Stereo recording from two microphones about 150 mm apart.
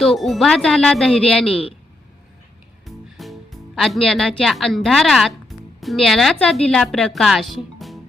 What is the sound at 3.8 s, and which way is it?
Speech, centre (ahead or behind).